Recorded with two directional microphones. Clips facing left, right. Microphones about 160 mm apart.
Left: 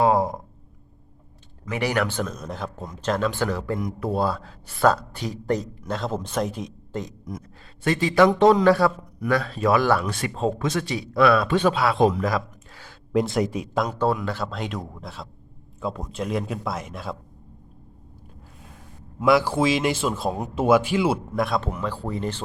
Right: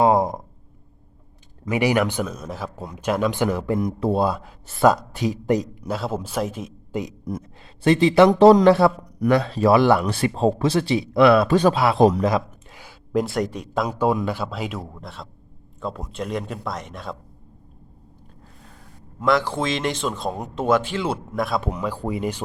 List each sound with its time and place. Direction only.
0.0 s a sound: 20° right (ahead or behind)
1.7 s a man's voice: 10° right (ahead or behind)
7.3 s speech: 30° right (ahead or behind)
8.3 s speech: 35° right (ahead or behind)
11.4 s speech: 40° right (ahead or behind)
11.8 s speech: 25° right (ahead or behind)
12.2 s a sound: 20° right (ahead or behind)
13.1 s speech: centre (ahead or behind)
13.8 s a man's voice: 10° right (ahead or behind)
19.2 s speech: 10° left (ahead or behind)
21.7 s a man's voice: 15° right (ahead or behind)